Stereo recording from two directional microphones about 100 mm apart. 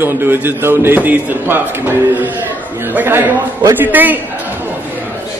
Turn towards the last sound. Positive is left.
turn(degrees=-20)  # may be behind; listen again after turning